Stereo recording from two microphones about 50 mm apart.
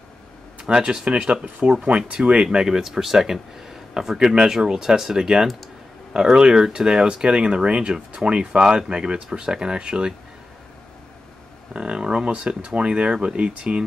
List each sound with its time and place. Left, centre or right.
0.6 s speech: centre
11.7 s speech: centre